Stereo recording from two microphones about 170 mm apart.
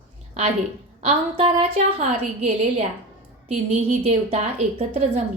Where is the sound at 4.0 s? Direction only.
40° right (ahead or behind).